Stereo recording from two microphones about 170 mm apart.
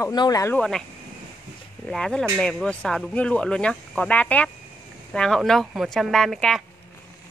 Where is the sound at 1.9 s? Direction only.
5° left (ahead or behind).